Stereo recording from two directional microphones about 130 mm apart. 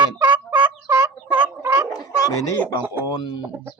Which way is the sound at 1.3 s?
15° right (ahead or behind).